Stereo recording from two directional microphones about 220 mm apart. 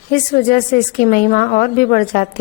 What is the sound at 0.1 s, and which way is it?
A woman's voice, 40° left (ahead or behind).